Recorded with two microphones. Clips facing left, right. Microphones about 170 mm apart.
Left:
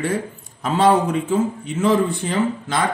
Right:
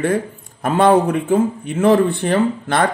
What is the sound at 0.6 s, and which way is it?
Speech, 55° right (ahead or behind).